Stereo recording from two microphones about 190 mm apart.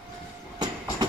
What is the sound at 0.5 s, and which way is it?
Train, 20° right (ahead or behind).